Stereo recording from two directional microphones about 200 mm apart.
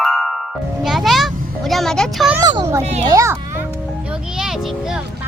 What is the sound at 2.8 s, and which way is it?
Speech, 35° right (ahead or behind).